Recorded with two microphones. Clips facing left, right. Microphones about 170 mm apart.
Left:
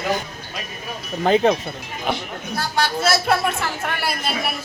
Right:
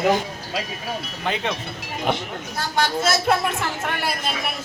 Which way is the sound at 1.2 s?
40° left (ahead or behind).